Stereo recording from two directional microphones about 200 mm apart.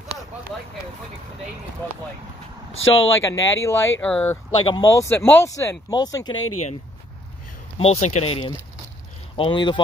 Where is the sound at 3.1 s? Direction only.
15° left (ahead or behind).